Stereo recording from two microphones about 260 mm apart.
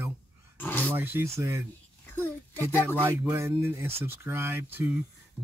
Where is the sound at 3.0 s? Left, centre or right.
Centre.